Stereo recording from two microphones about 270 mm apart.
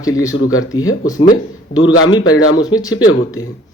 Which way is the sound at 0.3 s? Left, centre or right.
Left.